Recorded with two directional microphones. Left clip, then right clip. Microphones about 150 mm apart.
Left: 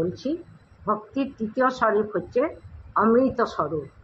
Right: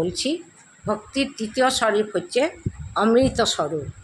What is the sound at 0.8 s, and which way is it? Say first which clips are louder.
A woman's voice: right 1 dB; 40° right (ahead or behind).